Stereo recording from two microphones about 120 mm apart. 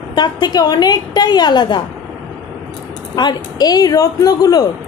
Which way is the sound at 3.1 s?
35° left (ahead or behind).